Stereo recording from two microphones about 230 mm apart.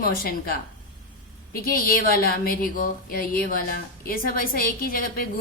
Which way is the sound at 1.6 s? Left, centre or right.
Left.